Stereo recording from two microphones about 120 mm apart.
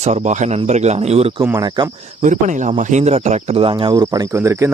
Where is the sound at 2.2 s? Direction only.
90° right; by 3.9 s 45° right (ahead or behind).